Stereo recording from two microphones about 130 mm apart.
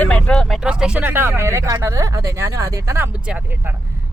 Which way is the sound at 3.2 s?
10° right (ahead or behind).